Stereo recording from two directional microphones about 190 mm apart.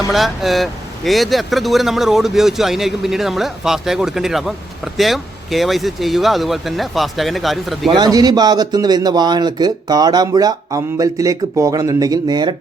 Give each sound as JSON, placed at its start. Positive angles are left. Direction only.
{"t": 0.1, "sound": "a man's voice", "side_deg": 0}
{"t": 7.9, "sound": "a man's voice", "side_deg": -20}